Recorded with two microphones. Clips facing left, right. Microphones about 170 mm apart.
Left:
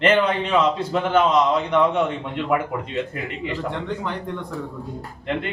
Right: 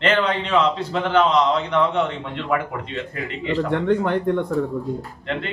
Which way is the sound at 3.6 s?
60° right (ahead or behind).